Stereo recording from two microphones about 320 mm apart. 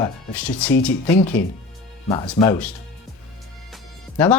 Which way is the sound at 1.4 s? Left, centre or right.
Left.